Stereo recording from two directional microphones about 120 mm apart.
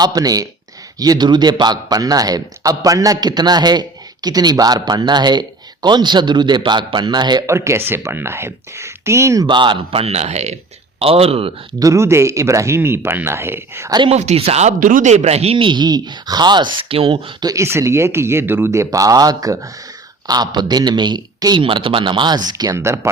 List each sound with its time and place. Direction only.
0.0 s a man's voice: 35° right (ahead or behind)
7.4 s speech: 25° right (ahead or behind)
9.5 s a man's voice: 40° right (ahead or behind); by 10.6 s 65° right (ahead or behind)
11.0 s speech: 55° right (ahead or behind)
11.8 s speech: 25° right (ahead or behind)
14.1 s speech: 65° right (ahead or behind); by 17.3 s 50° right (ahead or behind)
17.4 s a man's voice: 25° right (ahead or behind)